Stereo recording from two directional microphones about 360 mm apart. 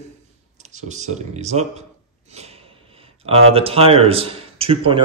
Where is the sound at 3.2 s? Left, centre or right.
Centre.